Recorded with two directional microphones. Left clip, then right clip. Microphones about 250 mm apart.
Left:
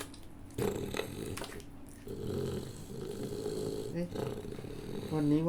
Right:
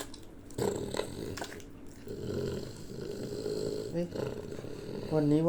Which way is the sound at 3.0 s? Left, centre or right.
Left.